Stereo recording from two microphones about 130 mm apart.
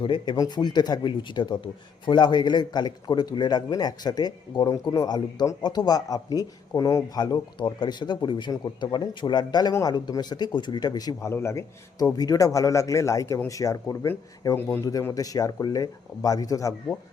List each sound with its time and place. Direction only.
0.0 s a man's voice: 35° left (ahead or behind)